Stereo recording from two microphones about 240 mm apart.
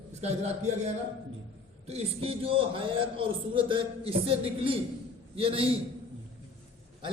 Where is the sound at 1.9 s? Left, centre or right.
Right.